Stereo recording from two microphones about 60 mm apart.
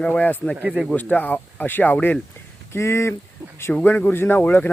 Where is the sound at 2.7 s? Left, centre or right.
Left.